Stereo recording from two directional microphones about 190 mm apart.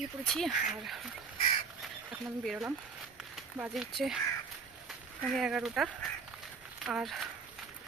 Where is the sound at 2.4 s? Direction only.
Centre (ahead or behind).